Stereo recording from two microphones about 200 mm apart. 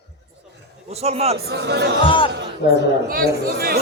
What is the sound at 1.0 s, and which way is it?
Speech, 30° right (ahead or behind).